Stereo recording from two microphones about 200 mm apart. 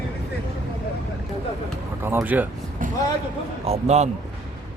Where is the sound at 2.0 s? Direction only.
10° right (ahead or behind).